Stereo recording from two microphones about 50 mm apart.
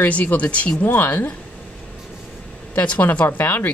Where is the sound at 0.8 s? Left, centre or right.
Left.